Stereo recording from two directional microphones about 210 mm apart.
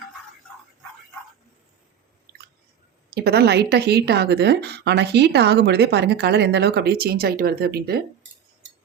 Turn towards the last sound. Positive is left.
turn(degrees=-45)  # may be behind; listen again after turning